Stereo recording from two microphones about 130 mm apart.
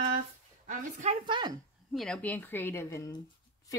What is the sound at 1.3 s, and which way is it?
Speech, 35° right (ahead or behind).